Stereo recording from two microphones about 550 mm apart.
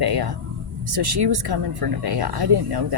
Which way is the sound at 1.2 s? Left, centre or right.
Right.